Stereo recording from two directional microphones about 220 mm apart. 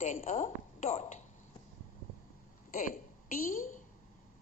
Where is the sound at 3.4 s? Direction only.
40° left (ahead or behind).